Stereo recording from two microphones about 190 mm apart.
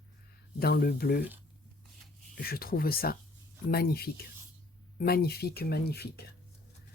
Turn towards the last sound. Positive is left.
turn(degrees=55)  # may be behind; listen again after turning